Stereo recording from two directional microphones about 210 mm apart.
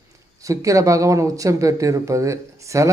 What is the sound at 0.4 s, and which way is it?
Speech, 15° right (ahead or behind).